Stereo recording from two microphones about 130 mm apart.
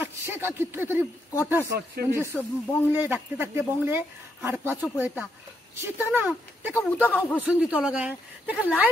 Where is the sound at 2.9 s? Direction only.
15° right (ahead or behind).